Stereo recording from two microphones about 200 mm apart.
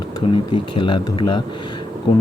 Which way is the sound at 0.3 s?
25° left (ahead or behind).